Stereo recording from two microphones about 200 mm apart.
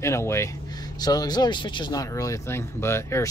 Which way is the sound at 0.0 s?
15° left (ahead or behind).